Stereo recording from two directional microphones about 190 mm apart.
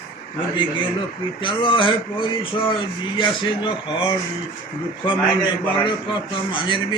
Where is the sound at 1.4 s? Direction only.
25° left (ahead or behind).